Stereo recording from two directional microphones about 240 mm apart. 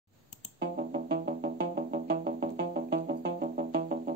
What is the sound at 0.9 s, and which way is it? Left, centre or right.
Music, right.